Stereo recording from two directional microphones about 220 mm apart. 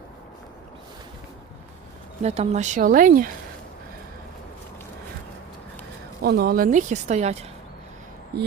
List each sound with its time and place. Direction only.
2.2 s speech: 30° right (ahead or behind)
6.2 s speech: 45° right (ahead or behind)
8.3 s a sound: 45° right (ahead or behind)